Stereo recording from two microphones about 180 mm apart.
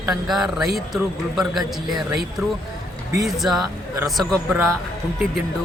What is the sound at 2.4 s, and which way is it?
Speech, 15° right (ahead or behind).